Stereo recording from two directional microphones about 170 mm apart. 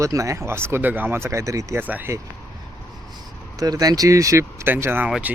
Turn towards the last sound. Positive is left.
turn(degrees=-10)  # may be behind; listen again after turning